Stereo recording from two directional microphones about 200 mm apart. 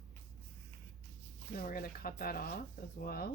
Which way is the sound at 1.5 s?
45° left (ahead or behind).